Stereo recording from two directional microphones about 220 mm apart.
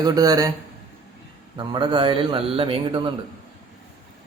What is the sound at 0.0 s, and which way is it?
Speech, 15° right (ahead or behind).